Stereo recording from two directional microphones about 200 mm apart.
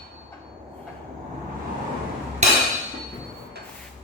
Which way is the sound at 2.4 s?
35° right (ahead or behind).